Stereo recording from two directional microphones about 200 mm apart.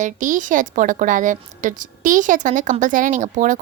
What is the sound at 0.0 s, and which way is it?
Speech, 40° right (ahead or behind).